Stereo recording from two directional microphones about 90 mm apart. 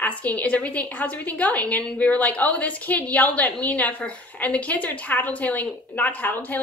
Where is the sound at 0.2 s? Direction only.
15° left (ahead or behind).